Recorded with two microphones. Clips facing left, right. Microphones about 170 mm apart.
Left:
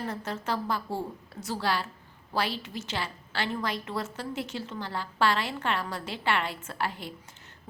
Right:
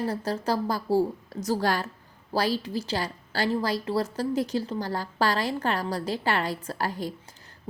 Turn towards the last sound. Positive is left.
turn(degrees=-40)  # may be behind; listen again after turning